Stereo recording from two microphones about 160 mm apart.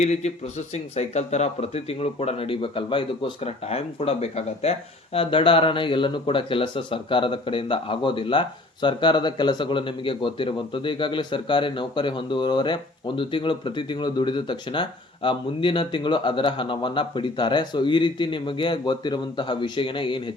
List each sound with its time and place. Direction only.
0.0 s speech: 45° left (ahead or behind)